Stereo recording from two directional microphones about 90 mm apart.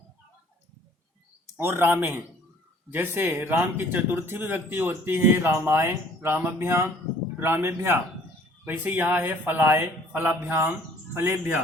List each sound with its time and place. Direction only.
1.5 s speech: 25° right (ahead or behind)